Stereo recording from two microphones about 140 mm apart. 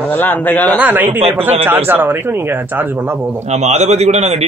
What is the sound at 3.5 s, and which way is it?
Speech, 55° right (ahead or behind).